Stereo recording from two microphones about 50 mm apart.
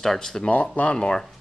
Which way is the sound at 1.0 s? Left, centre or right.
Centre.